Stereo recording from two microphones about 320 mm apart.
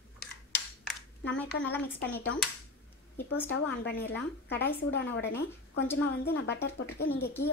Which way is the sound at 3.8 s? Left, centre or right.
Left.